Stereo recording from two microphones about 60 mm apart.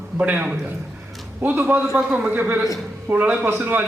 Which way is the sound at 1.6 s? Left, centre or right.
Right.